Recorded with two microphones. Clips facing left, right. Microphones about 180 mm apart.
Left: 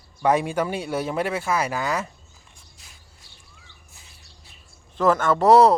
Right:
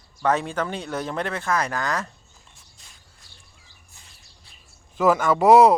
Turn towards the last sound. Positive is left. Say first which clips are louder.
# right 1 dB
turn(degrees=-10)  # may be behind; listen again after turning